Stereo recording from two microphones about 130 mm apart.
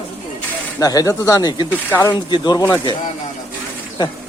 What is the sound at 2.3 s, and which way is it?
Speech, 35° left (ahead or behind).